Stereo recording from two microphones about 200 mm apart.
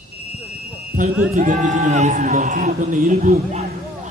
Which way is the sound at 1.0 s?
40° right (ahead or behind).